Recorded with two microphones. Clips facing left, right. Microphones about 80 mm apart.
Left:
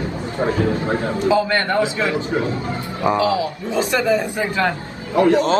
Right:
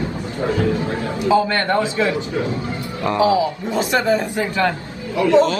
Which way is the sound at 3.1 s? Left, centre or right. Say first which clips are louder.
Right 6 dB; right.